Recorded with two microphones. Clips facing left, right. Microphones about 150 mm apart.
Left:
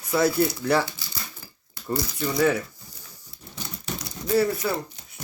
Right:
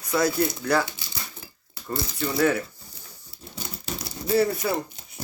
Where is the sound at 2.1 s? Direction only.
Centre (ahead or behind).